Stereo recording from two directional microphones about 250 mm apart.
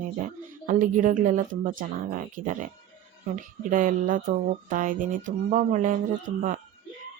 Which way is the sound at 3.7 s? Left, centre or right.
Right.